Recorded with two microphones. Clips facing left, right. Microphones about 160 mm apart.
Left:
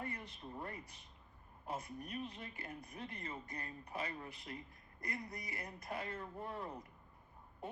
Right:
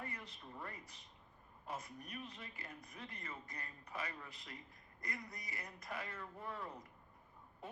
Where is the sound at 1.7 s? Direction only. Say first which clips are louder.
Left 4 dB; 30° left (ahead or behind).